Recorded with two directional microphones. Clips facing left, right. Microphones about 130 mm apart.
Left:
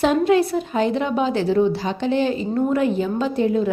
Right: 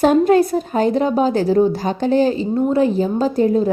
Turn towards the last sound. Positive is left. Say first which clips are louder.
# right 4 dB
turn(degrees=-40)  # may be behind; listen again after turning